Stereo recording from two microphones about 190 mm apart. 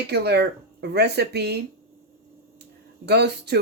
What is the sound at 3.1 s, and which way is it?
Speech, 60° right (ahead or behind).